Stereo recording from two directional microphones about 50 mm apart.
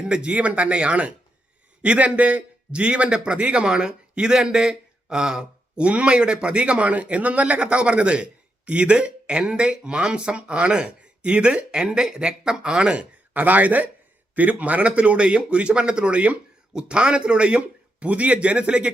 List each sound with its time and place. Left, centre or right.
0.0 s a man's voice: centre
13.3 s a man's voice: right